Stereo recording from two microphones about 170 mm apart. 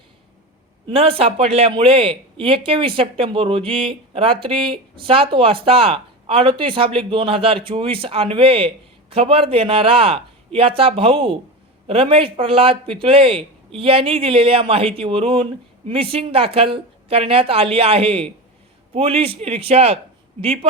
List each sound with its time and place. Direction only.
0.9 s speech: 35° right (ahead or behind)